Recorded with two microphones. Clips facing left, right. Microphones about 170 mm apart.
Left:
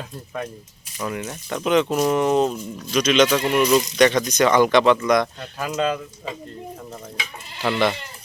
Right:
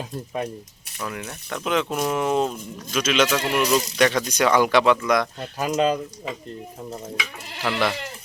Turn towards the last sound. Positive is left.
turn(degrees=0)  # may be behind; listen again after turning